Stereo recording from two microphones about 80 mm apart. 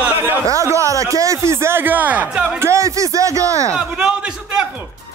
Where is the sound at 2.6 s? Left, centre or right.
Right.